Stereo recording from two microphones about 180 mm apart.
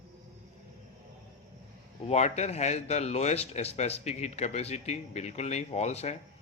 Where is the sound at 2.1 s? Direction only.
40° left (ahead or behind).